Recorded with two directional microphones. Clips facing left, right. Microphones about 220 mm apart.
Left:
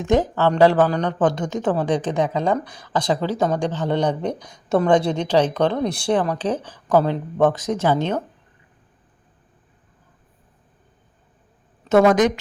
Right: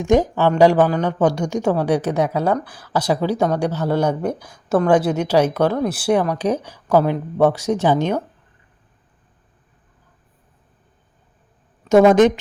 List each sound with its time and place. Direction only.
0.0 s speech: 15° right (ahead or behind)
11.9 s speech: 20° right (ahead or behind)